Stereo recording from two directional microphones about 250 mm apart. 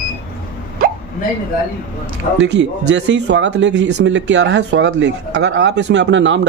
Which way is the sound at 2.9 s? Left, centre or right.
Right.